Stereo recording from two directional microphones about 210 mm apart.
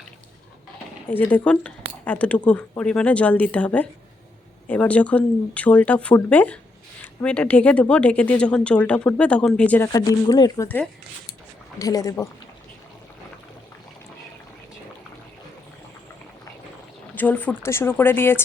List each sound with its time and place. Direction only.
1.1 s speech: 10° left (ahead or behind)
11.8 s speech: 15° left (ahead or behind)
17.2 s speech: 5° left (ahead or behind)